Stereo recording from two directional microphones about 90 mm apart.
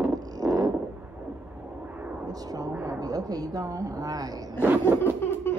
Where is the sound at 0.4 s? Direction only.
15° right (ahead or behind).